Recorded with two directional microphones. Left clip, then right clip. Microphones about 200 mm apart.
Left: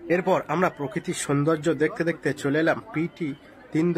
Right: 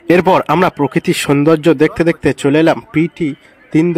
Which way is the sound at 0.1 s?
45° right (ahead or behind).